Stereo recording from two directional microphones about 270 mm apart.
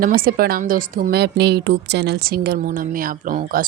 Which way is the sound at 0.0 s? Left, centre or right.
Right.